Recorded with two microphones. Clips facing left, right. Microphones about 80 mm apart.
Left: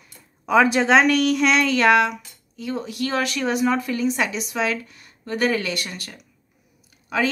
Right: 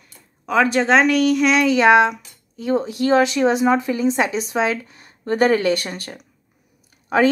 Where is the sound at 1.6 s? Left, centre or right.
Centre.